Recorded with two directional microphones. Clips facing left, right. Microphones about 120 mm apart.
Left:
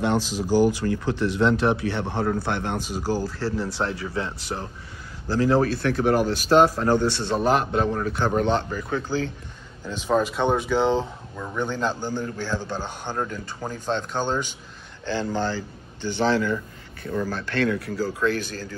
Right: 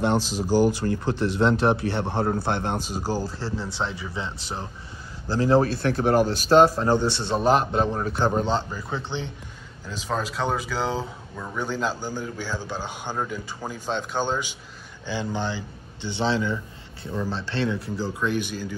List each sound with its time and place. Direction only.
0.0 s speech: 35° right (ahead or behind)
9.8 s a man's voice: centre (ahead or behind)